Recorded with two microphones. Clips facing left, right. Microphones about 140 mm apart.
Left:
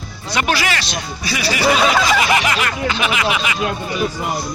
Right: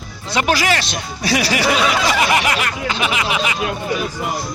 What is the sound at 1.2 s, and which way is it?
Speech, 85° right.